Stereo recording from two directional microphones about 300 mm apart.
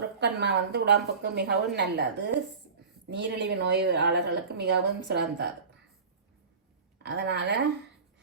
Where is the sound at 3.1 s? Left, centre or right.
Right.